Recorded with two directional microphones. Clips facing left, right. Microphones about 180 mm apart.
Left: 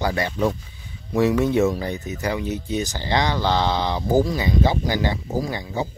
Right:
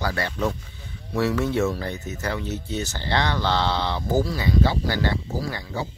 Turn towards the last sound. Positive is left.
turn(degrees=20)  # may be behind; listen again after turning